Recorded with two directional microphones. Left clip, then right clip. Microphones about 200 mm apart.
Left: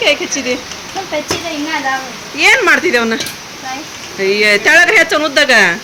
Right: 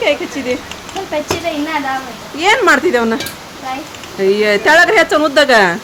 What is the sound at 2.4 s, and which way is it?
Speech, 10° right (ahead or behind).